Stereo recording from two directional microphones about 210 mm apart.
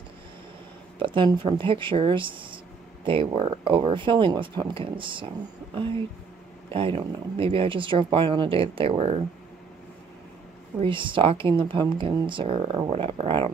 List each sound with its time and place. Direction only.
0.9 s speech: 25° right (ahead or behind)
6.7 s speech: 25° right (ahead or behind)
10.8 s speech: 25° right (ahead or behind)